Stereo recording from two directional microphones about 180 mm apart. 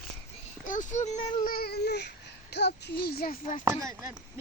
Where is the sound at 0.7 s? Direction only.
45° left (ahead or behind).